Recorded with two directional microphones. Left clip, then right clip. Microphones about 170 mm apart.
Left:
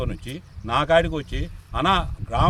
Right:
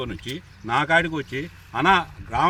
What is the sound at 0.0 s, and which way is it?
Speech, 25° left (ahead or behind).